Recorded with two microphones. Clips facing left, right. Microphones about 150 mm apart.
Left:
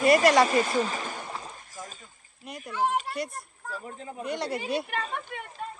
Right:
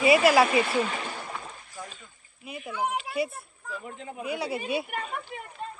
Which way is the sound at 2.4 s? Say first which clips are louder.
Right 2 dB; 5° right (ahead or behind).